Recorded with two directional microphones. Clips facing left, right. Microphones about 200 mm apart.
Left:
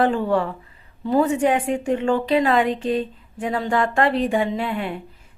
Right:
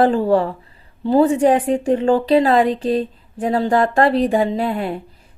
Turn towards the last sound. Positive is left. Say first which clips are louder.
# right 4 dB
turn(degrees=-35)  # may be behind; listen again after turning